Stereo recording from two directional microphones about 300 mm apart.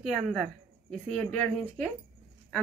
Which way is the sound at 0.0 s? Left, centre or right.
Centre.